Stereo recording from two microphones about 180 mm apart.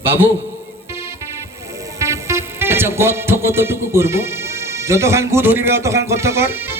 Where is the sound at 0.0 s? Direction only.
10° right (ahead or behind).